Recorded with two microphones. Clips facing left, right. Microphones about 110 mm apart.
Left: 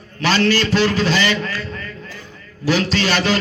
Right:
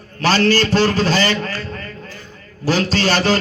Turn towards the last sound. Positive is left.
turn(degrees=-40)  # may be behind; listen again after turning